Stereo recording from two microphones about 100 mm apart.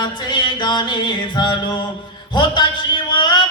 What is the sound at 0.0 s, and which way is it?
Music, 50° left (ahead or behind).